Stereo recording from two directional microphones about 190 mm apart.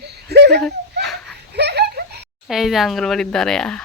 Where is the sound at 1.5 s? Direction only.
60° right (ahead or behind).